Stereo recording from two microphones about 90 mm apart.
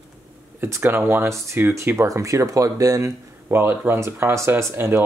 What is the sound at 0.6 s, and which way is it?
Speech, 25° right (ahead or behind).